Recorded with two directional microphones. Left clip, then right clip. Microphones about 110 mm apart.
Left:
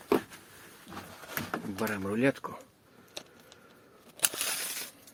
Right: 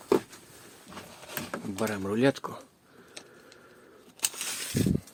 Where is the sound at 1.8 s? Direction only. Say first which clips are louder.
Right 1 dB; 20° right (ahead or behind).